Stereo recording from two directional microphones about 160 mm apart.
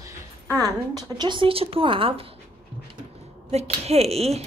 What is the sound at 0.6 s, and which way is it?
Speech, 25° right (ahead or behind).